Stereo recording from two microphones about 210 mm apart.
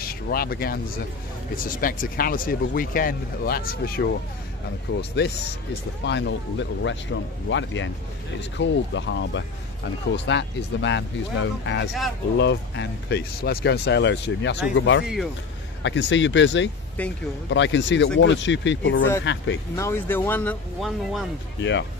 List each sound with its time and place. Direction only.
0.0 s speech: 45° left (ahead or behind)
4.9 s speech: 60° left (ahead or behind)
19.7 s speech: 10° left (ahead or behind)
21.5 s speech: 60° left (ahead or behind)